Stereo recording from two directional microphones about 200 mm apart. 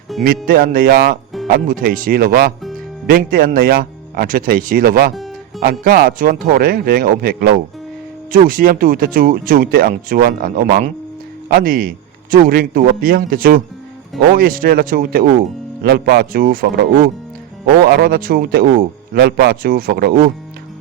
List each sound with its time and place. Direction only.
0.4 s speech: 45° right (ahead or behind)